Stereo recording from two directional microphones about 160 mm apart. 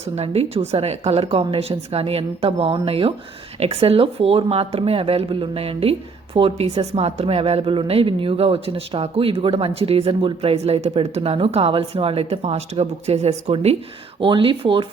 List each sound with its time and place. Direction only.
0.0 s speech: 40° right (ahead or behind)